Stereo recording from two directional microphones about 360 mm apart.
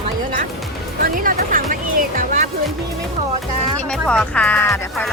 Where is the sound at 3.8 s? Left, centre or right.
Centre.